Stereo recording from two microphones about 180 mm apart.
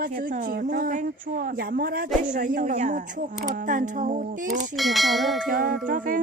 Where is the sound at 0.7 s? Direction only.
50° right (ahead or behind).